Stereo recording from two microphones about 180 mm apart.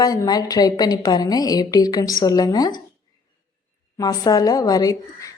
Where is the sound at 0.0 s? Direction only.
20° left (ahead or behind).